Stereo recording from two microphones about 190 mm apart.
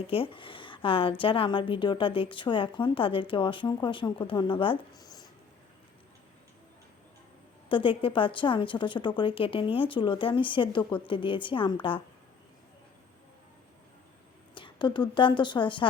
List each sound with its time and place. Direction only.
0.1 s a woman's voice: 30° left (ahead or behind)
7.7 s a woman's voice: 25° left (ahead or behind)
14.5 s a woman's voice: 25° left (ahead or behind)